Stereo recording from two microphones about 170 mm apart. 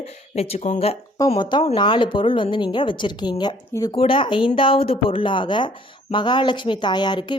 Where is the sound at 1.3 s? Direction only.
25° left (ahead or behind).